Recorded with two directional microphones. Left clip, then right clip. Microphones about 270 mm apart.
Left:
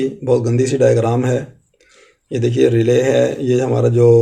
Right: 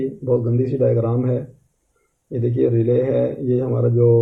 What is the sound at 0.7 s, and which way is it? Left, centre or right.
Speech, centre.